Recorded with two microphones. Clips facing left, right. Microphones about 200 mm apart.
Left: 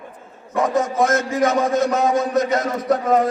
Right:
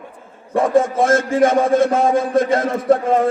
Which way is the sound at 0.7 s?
30° right (ahead or behind).